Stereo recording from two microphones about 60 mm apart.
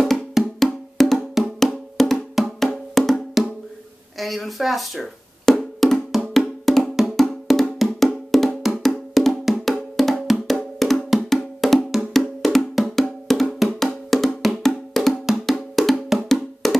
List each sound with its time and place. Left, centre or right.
0.1 s wood block: centre
4.2 s speech: centre
5.6 s wood block: centre